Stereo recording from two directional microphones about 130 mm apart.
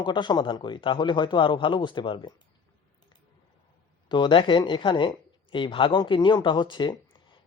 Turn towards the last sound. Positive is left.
turn(degrees=35)  # may be behind; listen again after turning